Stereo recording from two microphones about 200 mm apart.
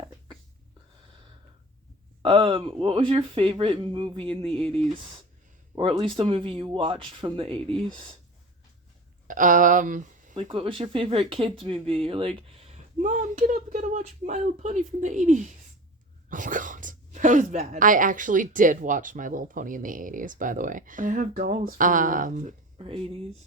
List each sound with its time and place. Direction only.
2.2 s speech: 25° right (ahead or behind)
9.2 s speech: 40° right (ahead or behind)
10.3 s speech: 25° right (ahead or behind)
22.8 s speech: 25° right (ahead or behind)